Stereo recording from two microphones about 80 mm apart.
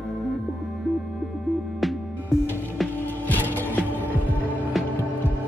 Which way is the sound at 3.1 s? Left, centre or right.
Left.